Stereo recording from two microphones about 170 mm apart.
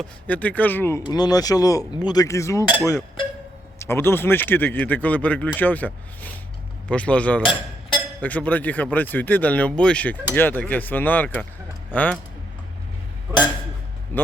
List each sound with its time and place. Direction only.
0.0 s speech: 10° left (ahead or behind)
1.0 s speech: 25° left (ahead or behind); by 12.2 s 5° left (ahead or behind)
14.1 s speech: 10° left (ahead or behind)